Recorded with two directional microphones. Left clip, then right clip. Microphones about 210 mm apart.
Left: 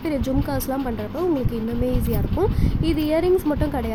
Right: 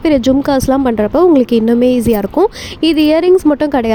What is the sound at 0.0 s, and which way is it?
Speech, 40° right (ahead or behind).